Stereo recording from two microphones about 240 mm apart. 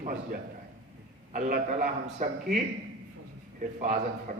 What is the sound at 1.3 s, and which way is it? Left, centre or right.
A man's voice, right.